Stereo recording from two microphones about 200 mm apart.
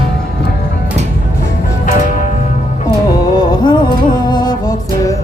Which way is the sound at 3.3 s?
20° left (ahead or behind).